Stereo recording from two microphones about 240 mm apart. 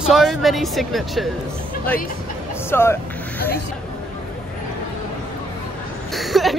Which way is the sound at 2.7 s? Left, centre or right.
Centre.